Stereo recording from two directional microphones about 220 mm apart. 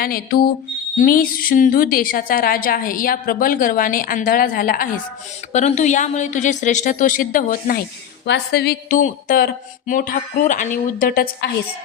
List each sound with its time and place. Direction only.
0.0 s a woman's voice: 40° left (ahead or behind)